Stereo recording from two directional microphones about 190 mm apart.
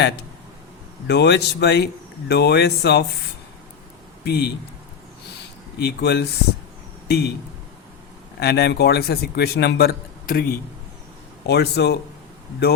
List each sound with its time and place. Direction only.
1.0 s a man's voice: 60° left (ahead or behind)
4.3 s a man's voice: 60° left (ahead or behind)
5.8 s a man's voice: 60° left (ahead or behind)
8.4 s a man's voice: 60° left (ahead or behind)